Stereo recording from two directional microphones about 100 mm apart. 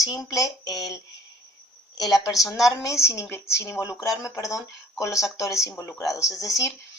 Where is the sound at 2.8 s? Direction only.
30° left (ahead or behind).